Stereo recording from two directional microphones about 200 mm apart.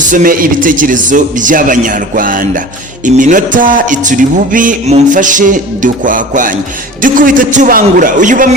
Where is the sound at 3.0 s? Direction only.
40° right (ahead or behind).